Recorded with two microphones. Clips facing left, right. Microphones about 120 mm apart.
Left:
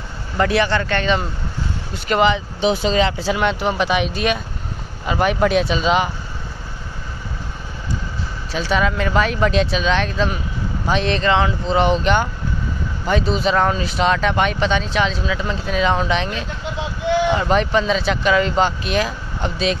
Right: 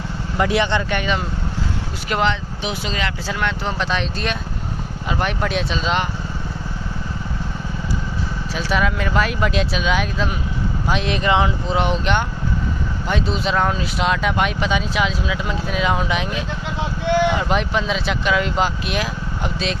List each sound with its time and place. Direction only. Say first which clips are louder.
0.4 s speech: left 1 dB; 20° right (ahead or behind)
2.0 s speech: left 4 dB; centre (ahead or behind)
2.6 s speech: left 10 dB; 30° left (ahead or behind)
3.3 s speech: left 5 dB; 15° left (ahead or behind)
8.5 s speech: left 2 dB; 5° right (ahead or behind)
11.7 s speech: left 5 dB; centre (ahead or behind)